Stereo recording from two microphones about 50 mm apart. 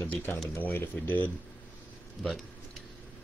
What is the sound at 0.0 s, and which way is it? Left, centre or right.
A man's voice, left.